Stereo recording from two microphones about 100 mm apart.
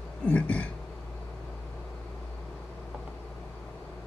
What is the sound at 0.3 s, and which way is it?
Speech, 10° left (ahead or behind).